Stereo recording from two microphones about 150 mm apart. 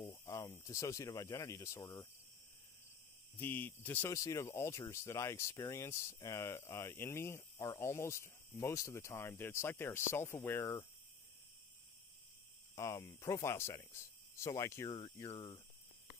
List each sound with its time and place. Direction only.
0.1 s speech: 20° left (ahead or behind)
3.3 s speech: 15° left (ahead or behind)
12.7 s speech: 20° left (ahead or behind)
14.9 s speech: 35° left (ahead or behind)